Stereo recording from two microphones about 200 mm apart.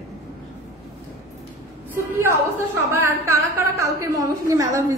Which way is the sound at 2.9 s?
10° right (ahead or behind).